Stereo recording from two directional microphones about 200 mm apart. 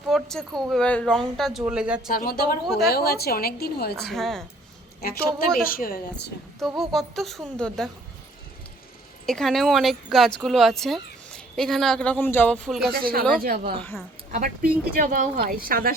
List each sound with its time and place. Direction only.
0.1 s speech: centre (ahead or behind)
2.1 s a woman's voice: 45° left (ahead or behind)
2.6 s speech: centre (ahead or behind)
2.9 s a woman's voice: 50° left (ahead or behind)
4.0 s speech: centre (ahead or behind)
5.7 s a woman's voice: 45° left (ahead or behind)
6.6 s speech: centre (ahead or behind)
9.2 s speech: centre (ahead or behind)
12.9 s speech: 45° right (ahead or behind)
13.7 s a woman's voice: 10° left (ahead or behind)
14.3 s speech: 40° right (ahead or behind)